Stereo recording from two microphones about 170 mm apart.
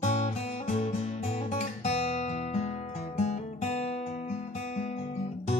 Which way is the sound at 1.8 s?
40° left (ahead or behind).